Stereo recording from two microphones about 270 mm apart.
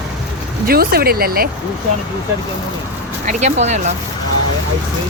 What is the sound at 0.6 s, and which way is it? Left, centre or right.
Speech, right.